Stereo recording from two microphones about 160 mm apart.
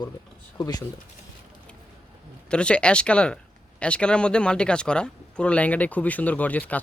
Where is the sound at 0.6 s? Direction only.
25° left (ahead or behind).